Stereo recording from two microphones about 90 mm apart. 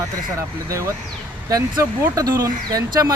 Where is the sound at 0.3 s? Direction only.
35° right (ahead or behind).